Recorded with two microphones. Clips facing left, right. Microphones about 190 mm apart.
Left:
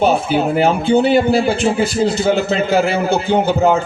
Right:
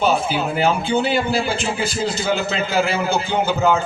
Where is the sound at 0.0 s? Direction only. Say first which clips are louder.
Left 5 dB; 55° left (ahead or behind).